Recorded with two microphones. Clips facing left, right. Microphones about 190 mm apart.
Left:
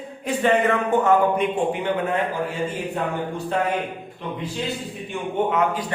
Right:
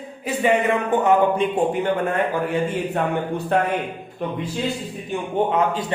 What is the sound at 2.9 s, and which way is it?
A man's voice, 60° right (ahead or behind).